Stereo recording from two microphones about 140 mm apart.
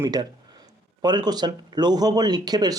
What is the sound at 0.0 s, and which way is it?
Speech, 30° right (ahead or behind).